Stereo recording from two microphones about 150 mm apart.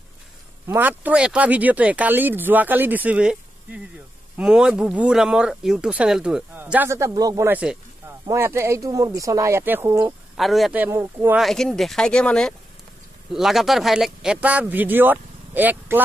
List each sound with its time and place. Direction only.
0.7 s speech: 10° right (ahead or behind)
7.4 s speech: 10° right (ahead or behind)
10.3 s speech: centre (ahead or behind)
10.8 s speech: 15° right (ahead or behind)
11.3 s speech: centre (ahead or behind)